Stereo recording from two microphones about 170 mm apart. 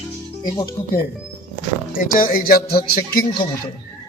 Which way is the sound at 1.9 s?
55° left (ahead or behind).